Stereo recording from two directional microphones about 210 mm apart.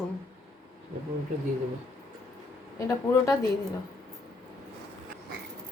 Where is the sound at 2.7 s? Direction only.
15° left (ahead or behind).